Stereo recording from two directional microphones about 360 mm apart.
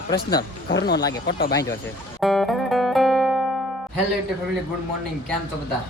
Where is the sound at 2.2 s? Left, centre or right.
Centre.